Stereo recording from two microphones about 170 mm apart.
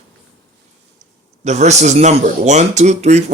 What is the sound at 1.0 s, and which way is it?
Speech, 45° right (ahead or behind).